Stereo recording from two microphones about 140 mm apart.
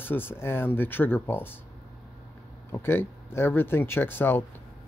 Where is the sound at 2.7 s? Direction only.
15° left (ahead or behind).